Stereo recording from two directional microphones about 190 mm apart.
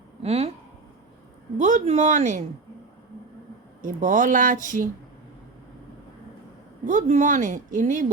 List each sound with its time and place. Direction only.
0.2 s speech: 35° right (ahead or behind)
1.5 s speech: 40° right (ahead or behind)
3.8 s a woman's voice: 45° right (ahead or behind)
6.8 s a woman's voice: 40° right (ahead or behind)